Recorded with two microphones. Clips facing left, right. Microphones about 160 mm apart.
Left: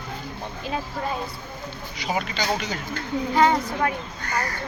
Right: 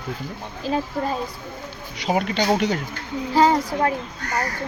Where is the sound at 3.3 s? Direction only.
35° right (ahead or behind).